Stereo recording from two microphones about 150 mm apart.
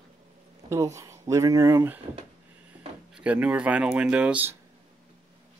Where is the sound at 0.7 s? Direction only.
20° right (ahead or behind).